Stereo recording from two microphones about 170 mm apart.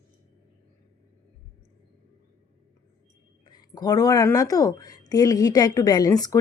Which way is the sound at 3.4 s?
25° left (ahead or behind).